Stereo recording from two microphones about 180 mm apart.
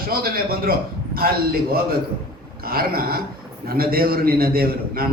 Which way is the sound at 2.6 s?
55° right (ahead or behind).